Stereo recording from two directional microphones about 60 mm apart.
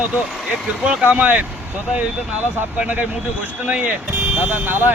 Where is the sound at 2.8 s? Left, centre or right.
Right.